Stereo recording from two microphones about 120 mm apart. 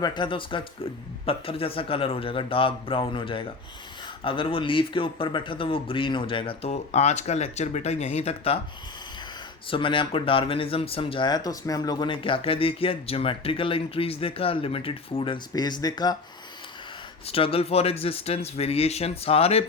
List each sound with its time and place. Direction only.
0.0 s speech: 40° left (ahead or behind); by 8.5 s 60° left (ahead or behind)
9.6 s speech: 45° left (ahead or behind)
12.1 s speech: 50° left (ahead or behind)
17.2 s speech: 55° left (ahead or behind)